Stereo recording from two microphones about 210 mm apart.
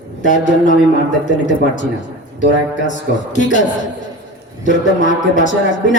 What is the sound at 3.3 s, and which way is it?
Speech, 35° left (ahead or behind).